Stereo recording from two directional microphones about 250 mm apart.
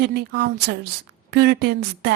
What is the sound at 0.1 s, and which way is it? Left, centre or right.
A woman's voice, right.